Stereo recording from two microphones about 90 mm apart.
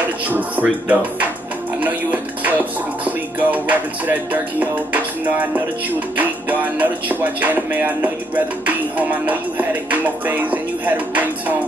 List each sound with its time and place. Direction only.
0.3 s music: 20° right (ahead or behind)